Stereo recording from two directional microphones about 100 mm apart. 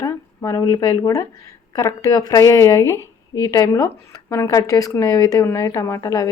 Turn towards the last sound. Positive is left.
turn(degrees=35)  # may be behind; listen again after turning